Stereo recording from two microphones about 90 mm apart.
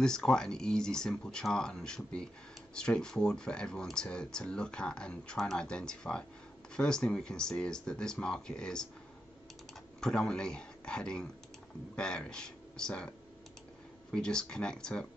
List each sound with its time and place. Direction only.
0.0 s speech: 5° left (ahead or behind)
9.9 s speech: 10° left (ahead or behind)
14.1 s speech: 10° left (ahead or behind)